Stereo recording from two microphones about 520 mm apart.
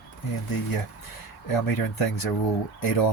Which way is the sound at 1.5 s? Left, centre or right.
Left.